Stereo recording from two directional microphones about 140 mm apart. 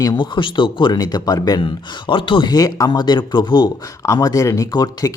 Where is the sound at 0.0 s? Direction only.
30° left (ahead or behind).